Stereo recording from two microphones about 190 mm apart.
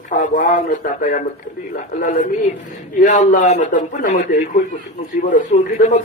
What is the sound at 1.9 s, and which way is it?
A man's voice, 45° left (ahead or behind).